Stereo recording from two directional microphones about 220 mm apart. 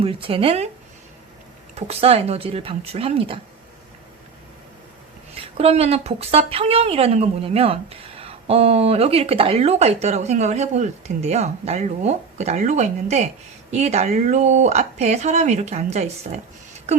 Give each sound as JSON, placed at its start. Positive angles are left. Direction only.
{"t": 0.0, "sound": "speech", "side_deg": -25}
{"t": 1.7, "sound": "speech", "side_deg": -25}
{"t": 5.4, "sound": "speech", "side_deg": -25}